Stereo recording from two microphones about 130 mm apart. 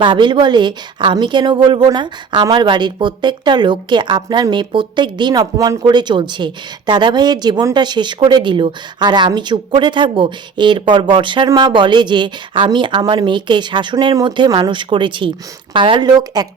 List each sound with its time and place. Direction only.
0.0 s a woman's voice: 35° right (ahead or behind)